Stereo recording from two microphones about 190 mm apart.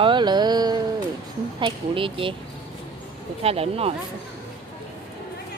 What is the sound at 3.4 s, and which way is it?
Speech, 30° right (ahead or behind).